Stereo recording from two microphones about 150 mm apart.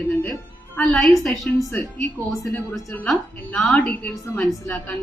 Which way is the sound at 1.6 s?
15° left (ahead or behind).